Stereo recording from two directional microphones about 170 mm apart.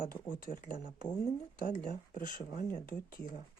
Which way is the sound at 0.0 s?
55° left (ahead or behind).